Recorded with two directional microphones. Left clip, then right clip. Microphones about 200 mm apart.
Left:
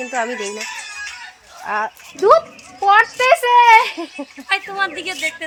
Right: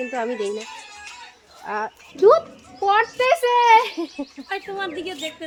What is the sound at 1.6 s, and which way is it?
A child's voice, 20° left (ahead or behind).